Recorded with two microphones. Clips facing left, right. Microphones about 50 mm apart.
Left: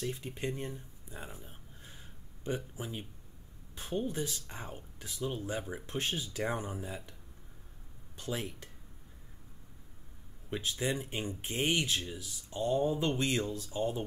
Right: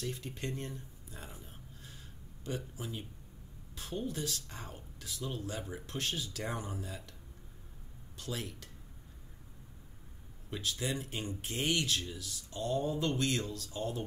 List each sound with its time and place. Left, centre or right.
0.0 s speech: centre
8.2 s speech: left
10.5 s speech: left